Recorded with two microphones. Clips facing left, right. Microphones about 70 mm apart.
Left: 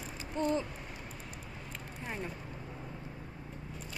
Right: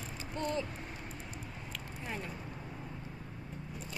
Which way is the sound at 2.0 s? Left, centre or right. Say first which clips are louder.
Left 2 dB; centre.